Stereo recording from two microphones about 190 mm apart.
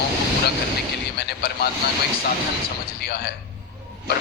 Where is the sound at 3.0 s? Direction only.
55° left (ahead or behind).